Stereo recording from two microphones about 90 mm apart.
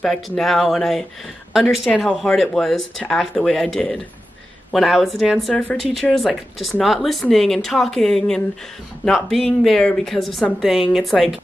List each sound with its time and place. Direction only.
0.0 s speech: 5° left (ahead or behind)
5.5 s speech: 20° left (ahead or behind)
6.1 s speech: centre (ahead or behind)